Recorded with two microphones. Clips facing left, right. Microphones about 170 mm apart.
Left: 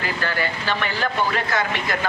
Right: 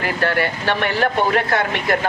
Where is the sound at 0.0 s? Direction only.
60° right (ahead or behind).